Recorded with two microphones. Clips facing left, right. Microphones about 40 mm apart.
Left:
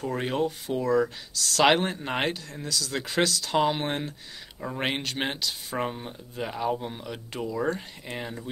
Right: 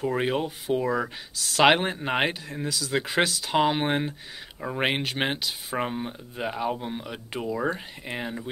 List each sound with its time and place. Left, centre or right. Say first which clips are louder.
0.0 s speech: right 2 dB; centre